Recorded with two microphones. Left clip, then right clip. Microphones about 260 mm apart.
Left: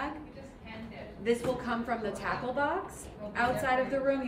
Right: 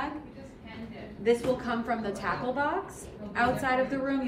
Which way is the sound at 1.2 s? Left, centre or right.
Centre.